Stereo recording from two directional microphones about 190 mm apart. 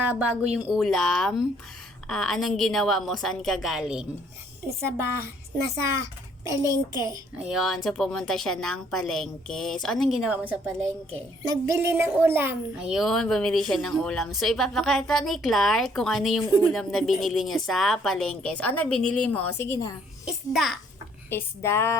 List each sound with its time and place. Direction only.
0.1 s a child's voice: 10° right (ahead or behind)
4.8 s a child's voice: 15° right (ahead or behind)
7.3 s a child's voice: 5° right (ahead or behind)
11.4 s a child's voice: 15° right (ahead or behind); by 20.0 s 15° left (ahead or behind)
20.2 s a child's voice: centre (ahead or behind)
21.2 s speech: 15° left (ahead or behind)